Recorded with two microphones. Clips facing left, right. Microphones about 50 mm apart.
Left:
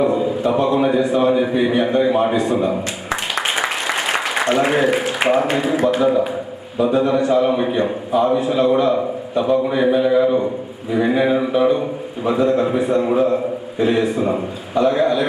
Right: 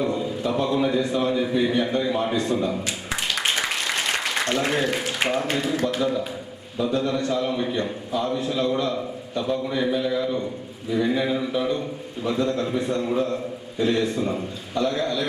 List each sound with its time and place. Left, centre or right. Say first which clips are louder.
0.0 s a man's voice: left 8 dB; centre